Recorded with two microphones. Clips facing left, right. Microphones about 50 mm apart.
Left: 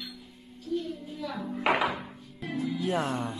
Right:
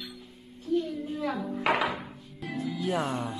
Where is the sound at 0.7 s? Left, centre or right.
Right.